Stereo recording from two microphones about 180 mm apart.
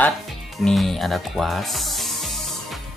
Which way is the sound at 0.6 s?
Centre (ahead or behind).